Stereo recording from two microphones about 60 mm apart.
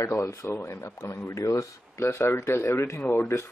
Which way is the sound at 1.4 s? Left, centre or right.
Left.